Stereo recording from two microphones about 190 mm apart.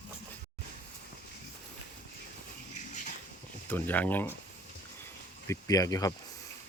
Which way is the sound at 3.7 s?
10° left (ahead or behind).